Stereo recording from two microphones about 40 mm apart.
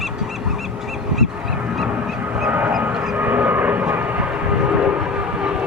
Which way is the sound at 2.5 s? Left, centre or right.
Right.